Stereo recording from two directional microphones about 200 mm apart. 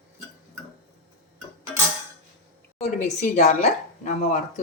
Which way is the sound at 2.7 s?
35° left (ahead or behind).